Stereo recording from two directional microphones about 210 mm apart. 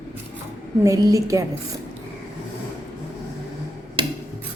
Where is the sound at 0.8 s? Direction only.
15° right (ahead or behind).